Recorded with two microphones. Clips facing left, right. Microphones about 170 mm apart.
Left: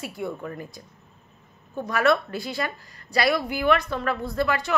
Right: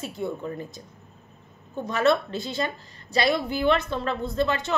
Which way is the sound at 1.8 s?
25° right (ahead or behind).